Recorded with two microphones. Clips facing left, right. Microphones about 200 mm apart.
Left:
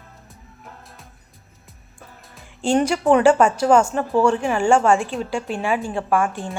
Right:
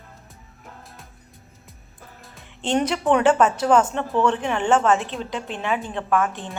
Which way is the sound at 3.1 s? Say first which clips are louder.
Left 3 dB; 10° left (ahead or behind).